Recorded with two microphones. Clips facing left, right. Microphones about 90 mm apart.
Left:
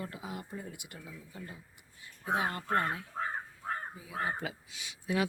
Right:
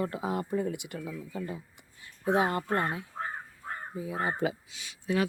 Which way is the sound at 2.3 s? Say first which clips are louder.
Right 4 dB; 30° right (ahead or behind).